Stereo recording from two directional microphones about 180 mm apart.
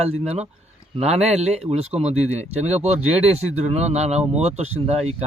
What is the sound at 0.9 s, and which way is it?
Speech, 35° right (ahead or behind).